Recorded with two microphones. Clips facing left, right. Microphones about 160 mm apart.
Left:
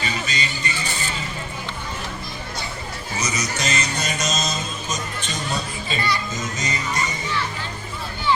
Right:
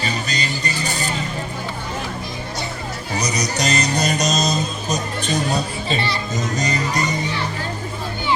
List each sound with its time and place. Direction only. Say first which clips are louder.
0.0 s music: right 3 dB; 40° right (ahead or behind)
3.2 s music: right 4 dB; 35° right (ahead or behind)
4.2 s speech: right 6 dB; 35° right (ahead or behind)
6.6 s music: right 4 dB; 35° right (ahead or behind)